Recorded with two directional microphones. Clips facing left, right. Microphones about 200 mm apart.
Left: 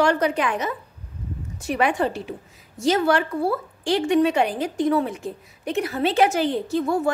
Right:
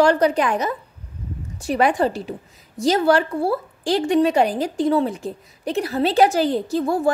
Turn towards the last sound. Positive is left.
turn(degrees=-35)  # may be behind; listen again after turning